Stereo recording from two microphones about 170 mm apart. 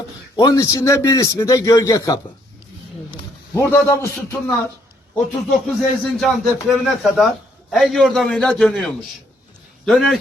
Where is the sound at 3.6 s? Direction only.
10° left (ahead or behind).